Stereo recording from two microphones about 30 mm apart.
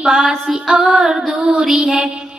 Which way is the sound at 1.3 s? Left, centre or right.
Right.